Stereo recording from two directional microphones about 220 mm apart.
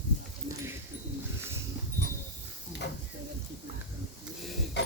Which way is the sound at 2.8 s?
50° left (ahead or behind).